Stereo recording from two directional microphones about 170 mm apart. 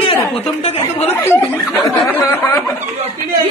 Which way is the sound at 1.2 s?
10° left (ahead or behind).